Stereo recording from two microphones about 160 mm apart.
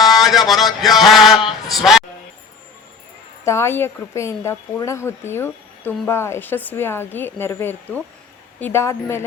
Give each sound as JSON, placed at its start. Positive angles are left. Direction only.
{"t": 0.0, "sound": "a sound", "side_deg": 0}
{"t": 1.7, "sound": "speech", "side_deg": 0}
{"t": 3.4, "sound": "a woman's voice", "side_deg": 15}